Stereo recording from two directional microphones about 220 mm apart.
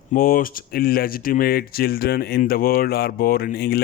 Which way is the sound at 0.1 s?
40° left (ahead or behind).